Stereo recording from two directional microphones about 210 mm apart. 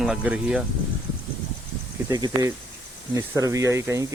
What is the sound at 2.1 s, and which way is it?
Speech, 20° right (ahead or behind).